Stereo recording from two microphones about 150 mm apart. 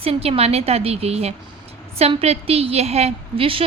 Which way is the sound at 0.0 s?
40° right (ahead or behind).